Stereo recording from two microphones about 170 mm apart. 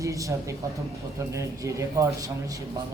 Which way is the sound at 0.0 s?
20° right (ahead or behind).